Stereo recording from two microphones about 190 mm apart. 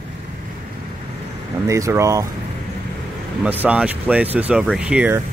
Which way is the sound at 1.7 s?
15° right (ahead or behind).